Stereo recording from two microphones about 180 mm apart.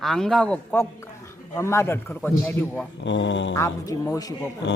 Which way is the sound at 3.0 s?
90° left.